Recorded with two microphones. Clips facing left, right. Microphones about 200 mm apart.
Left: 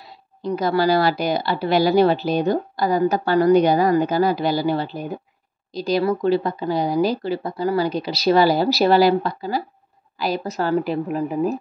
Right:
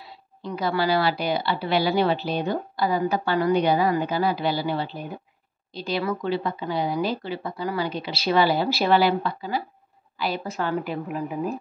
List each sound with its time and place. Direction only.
0.4 s speech: 40° left (ahead or behind)